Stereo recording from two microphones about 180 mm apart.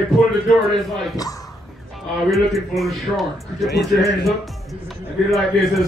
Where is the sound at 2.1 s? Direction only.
Centre (ahead or behind).